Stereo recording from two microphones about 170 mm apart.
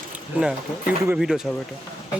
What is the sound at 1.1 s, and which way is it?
Speech, 5° right (ahead or behind).